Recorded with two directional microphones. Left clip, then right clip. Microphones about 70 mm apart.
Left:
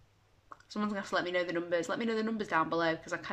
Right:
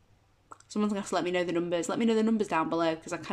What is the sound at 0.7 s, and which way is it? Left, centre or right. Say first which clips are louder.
Speech: right 3 dB; right.